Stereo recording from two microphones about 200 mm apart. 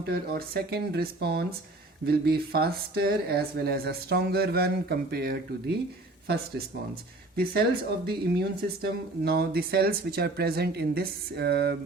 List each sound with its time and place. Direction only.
0.0 s speech: 50° right (ahead or behind)
7.3 s speech: 50° right (ahead or behind)